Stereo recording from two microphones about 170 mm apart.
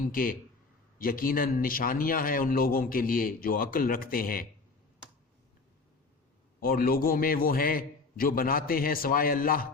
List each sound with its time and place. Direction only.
0.0 s a man's voice: 55° left (ahead or behind)
6.6 s a man's voice: 60° left (ahead or behind)